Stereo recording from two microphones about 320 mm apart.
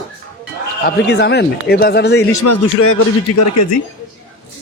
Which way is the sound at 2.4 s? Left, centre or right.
Left.